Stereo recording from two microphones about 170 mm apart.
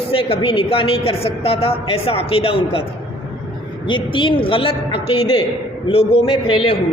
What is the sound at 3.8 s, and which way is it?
A woman's voice, 30° left (ahead or behind).